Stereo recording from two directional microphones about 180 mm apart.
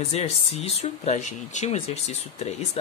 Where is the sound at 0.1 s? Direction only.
35° left (ahead or behind).